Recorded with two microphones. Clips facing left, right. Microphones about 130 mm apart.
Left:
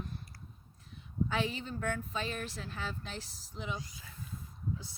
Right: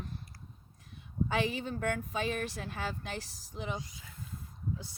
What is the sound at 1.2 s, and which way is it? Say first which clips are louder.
Speech: right 3 dB; 65° right (ahead or behind).